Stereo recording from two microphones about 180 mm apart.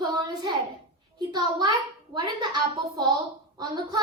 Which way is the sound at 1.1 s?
25° right (ahead or behind).